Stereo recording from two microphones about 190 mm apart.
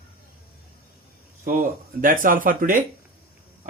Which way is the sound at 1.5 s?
45° right (ahead or behind).